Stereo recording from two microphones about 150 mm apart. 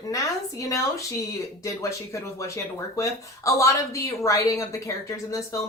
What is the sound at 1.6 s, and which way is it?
Speech, 20° left (ahead or behind).